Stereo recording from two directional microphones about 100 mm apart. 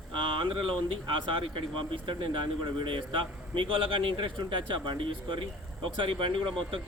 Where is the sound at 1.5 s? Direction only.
55° right (ahead or behind).